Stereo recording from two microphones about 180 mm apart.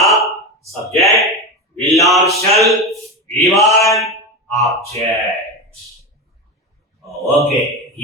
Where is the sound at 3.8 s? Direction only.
15° left (ahead or behind).